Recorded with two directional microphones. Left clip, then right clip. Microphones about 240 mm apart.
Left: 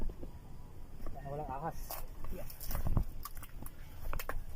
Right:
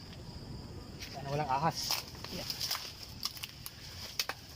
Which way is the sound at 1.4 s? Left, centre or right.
Right.